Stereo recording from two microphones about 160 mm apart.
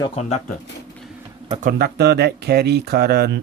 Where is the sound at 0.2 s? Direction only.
40° left (ahead or behind).